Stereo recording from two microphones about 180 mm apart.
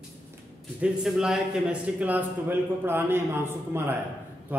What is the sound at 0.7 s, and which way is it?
A man's voice, 5° right (ahead or behind).